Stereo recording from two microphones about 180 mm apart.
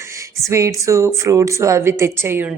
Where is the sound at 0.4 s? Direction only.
15° right (ahead or behind).